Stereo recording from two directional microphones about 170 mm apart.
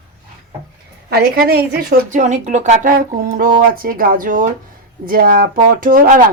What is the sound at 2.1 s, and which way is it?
Speech, 45° right (ahead or behind).